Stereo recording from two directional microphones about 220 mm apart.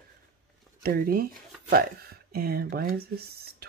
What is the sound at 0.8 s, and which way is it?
Speech, 45° right (ahead or behind).